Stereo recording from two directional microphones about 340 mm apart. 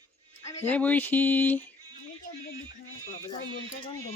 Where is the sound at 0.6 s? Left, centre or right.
Centre.